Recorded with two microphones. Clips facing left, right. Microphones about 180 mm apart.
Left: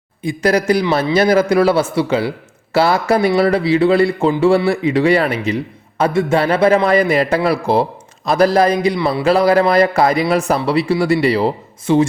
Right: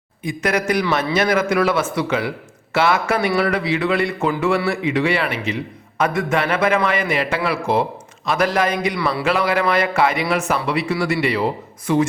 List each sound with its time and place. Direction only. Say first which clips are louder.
0.2 s a man's voice: left 5 dB; 30° left (ahead or behind)
9.0 s speech: left 4 dB; 20° left (ahead or behind)
9.2 s a man's voice: left 8 dB; 35° left (ahead or behind)